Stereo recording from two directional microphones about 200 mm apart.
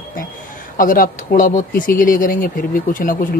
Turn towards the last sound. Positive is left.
turn(degrees=45)  # may be behind; listen again after turning